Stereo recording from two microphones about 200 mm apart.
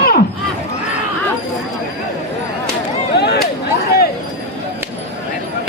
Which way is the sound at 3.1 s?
55° left (ahead or behind).